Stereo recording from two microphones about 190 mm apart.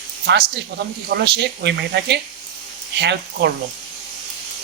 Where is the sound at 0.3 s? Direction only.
60° right (ahead or behind).